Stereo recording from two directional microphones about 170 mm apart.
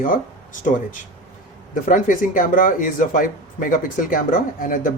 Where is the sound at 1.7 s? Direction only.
50° left (ahead or behind).